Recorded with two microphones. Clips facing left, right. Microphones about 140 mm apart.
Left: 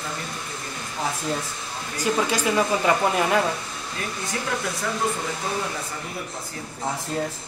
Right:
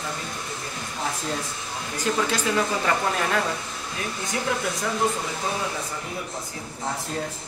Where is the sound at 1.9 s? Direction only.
10° left (ahead or behind).